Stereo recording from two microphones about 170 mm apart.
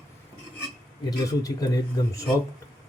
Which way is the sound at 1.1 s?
20° left (ahead or behind).